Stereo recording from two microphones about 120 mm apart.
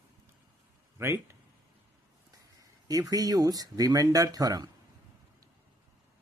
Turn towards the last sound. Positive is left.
turn(degrees=-30)  # may be behind; listen again after turning